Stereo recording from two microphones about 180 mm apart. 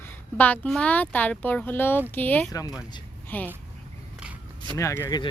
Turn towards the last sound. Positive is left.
turn(degrees=15)  # may be behind; listen again after turning